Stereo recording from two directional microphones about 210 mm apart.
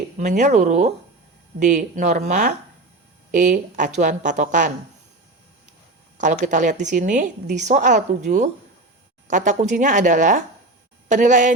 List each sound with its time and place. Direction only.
0.2 s a woman's voice: 35° right (ahead or behind)
6.1 s a woman's voice: 40° right (ahead or behind)